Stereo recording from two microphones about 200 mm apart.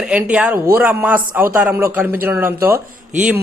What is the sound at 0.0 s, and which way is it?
A man's voice, 5° right (ahead or behind).